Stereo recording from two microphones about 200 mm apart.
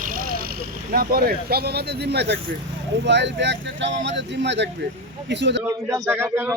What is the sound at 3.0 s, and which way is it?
Speech, 60° right (ahead or behind).